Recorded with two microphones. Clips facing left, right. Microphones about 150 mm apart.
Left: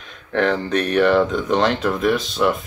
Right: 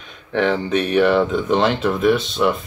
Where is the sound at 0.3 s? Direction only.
Centre (ahead or behind).